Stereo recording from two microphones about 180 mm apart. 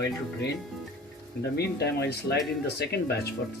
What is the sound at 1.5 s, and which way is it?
Speech, 65° left (ahead or behind).